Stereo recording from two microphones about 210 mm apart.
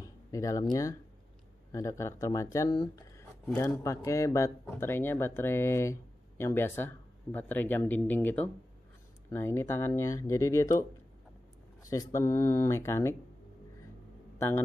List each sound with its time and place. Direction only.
0.0 s speech: 15° left (ahead or behind)